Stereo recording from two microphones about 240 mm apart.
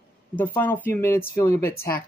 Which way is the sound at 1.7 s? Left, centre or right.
Left.